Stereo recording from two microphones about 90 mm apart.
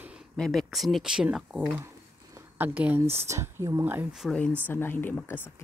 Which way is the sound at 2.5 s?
20° right (ahead or behind).